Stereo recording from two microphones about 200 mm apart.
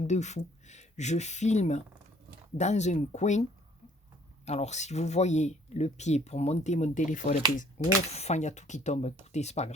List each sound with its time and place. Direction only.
0.0 s speech: 35° left (ahead or behind)
4.4 s speech: 35° left (ahead or behind)